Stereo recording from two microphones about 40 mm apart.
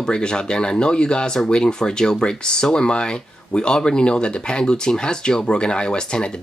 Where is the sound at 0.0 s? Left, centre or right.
Left.